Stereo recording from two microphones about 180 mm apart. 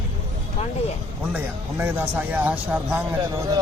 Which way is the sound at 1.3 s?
10° right (ahead or behind).